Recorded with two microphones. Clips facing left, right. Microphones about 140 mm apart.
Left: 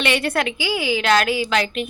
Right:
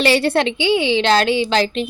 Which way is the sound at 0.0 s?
30° right (ahead or behind).